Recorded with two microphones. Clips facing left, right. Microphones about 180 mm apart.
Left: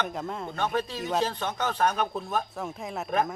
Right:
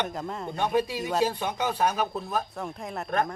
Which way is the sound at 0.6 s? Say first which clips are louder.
Right 4 dB; 15° right (ahead or behind).